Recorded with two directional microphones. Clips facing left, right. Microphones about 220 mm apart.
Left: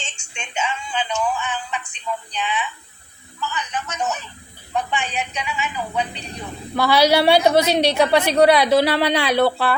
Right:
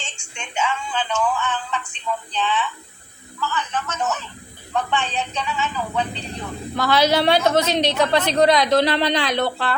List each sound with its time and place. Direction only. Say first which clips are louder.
0.0 s a woman's voice: even; 20° left (ahead or behind)